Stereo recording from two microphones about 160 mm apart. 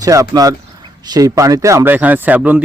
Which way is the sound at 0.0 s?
20° right (ahead or behind).